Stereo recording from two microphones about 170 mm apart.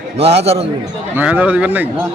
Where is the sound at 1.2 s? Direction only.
10° right (ahead or behind).